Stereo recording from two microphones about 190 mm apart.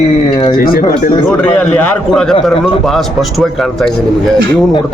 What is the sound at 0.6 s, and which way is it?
Speech, 50° left (ahead or behind).